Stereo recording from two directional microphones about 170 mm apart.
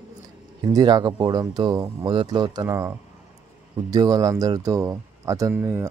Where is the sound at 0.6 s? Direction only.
25° right (ahead or behind).